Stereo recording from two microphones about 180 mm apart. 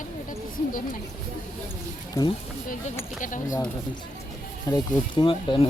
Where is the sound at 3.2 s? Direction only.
45° left (ahead or behind).